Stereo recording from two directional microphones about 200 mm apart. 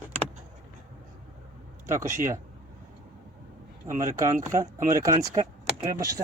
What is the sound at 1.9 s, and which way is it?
Speech, 15° right (ahead or behind).